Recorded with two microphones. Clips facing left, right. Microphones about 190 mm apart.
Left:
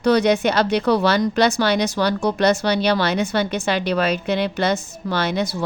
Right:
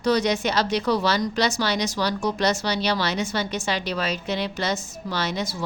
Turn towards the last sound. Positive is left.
turn(degrees=60)  # may be behind; listen again after turning